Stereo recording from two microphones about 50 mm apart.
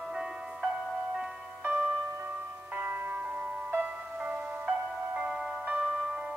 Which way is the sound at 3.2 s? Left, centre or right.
Right.